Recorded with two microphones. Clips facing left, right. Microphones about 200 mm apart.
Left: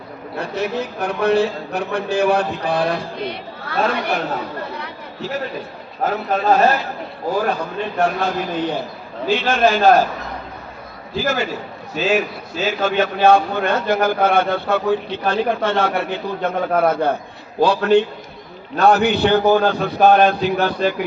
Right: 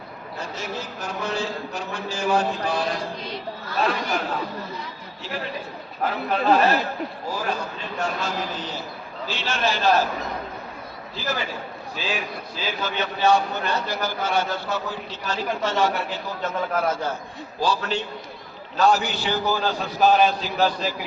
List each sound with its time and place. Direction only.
0.3 s a man's voice: 65° left (ahead or behind)
6.0 s a man's voice: 45° left (ahead or behind)
7.3 s a man's voice: 55° left (ahead or behind)
11.1 s a man's voice: 50° left (ahead or behind)
12.8 s a man's voice: 50° left (ahead or behind)